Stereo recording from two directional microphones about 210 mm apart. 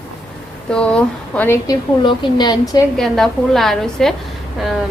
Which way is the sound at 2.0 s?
20° left (ahead or behind).